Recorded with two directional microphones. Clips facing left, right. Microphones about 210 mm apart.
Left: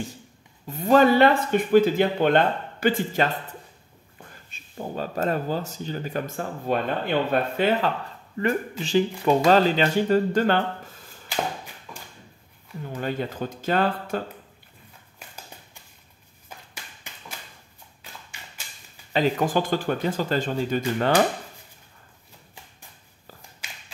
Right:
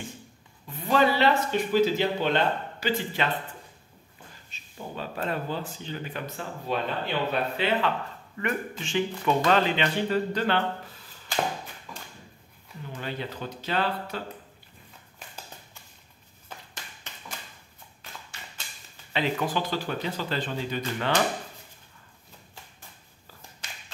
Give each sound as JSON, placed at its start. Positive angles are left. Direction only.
{"t": 0.7, "sound": "speech", "side_deg": 45}
{"t": 4.5, "sound": "speech", "side_deg": 45}
{"t": 8.4, "sound": "speech", "side_deg": 35}
{"t": 12.9, "sound": "speech", "side_deg": 45}
{"t": 16.4, "sound": "a sound", "side_deg": 10}
{"t": 19.1, "sound": "speech", "side_deg": 40}